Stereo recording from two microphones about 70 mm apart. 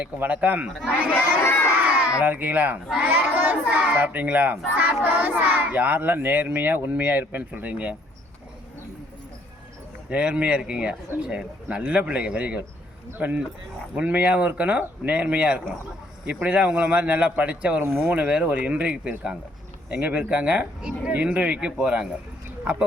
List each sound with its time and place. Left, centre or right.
0.0 s speech: right
1.6 s crowd: right
2.0 s speech: right
10.1 s a man's voice: centre